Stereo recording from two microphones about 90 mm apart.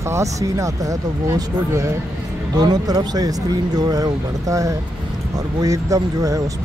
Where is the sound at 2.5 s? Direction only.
50° right (ahead or behind).